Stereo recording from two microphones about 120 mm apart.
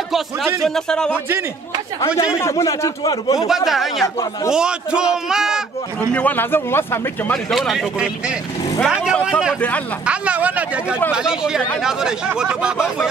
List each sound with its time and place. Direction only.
0.7 s speech: 5° left (ahead or behind)
2.3 s speech: 25° left (ahead or behind)
3.3 s speech: 5° right (ahead or behind)
6.1 s speech: 15° left (ahead or behind)
7.5 s speech: centre (ahead or behind)